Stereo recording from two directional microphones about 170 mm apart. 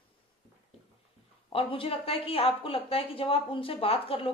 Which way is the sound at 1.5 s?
35° left (ahead or behind).